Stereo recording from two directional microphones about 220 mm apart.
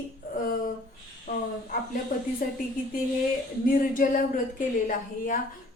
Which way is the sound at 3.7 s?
40° left (ahead or behind).